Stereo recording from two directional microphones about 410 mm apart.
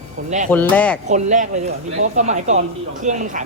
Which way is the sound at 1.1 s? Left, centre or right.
Centre.